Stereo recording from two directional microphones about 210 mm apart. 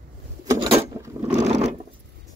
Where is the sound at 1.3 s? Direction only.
30° right (ahead or behind).